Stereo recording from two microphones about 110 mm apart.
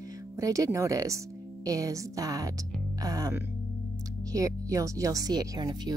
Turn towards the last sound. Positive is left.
turn(degrees=-40)  # may be behind; listen again after turning